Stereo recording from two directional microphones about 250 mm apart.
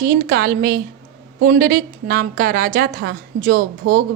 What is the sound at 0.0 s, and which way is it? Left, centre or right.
A woman's voice, right.